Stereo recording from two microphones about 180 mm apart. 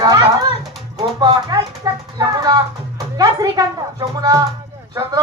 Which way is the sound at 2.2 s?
25° right (ahead or behind).